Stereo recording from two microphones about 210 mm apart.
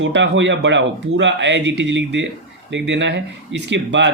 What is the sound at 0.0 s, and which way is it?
Speech, 60° right (ahead or behind).